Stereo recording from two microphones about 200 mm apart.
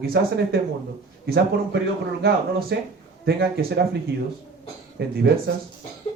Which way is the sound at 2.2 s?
50° right (ahead or behind).